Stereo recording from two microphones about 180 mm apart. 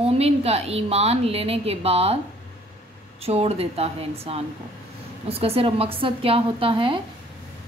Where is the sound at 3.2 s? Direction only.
35° right (ahead or behind).